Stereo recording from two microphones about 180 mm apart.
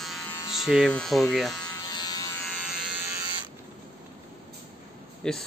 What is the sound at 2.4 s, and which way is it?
Electric shaver, centre (ahead or behind).